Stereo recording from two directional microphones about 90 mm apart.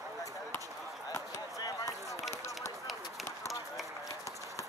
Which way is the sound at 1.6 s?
35° left (ahead or behind).